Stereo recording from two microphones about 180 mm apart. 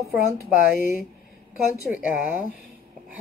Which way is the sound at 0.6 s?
50° left (ahead or behind).